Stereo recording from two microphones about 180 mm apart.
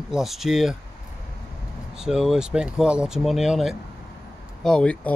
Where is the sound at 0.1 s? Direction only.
Centre (ahead or behind).